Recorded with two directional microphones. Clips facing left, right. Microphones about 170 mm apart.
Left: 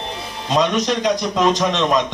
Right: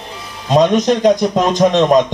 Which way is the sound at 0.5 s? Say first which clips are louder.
Right 6 dB; 50° right (ahead or behind).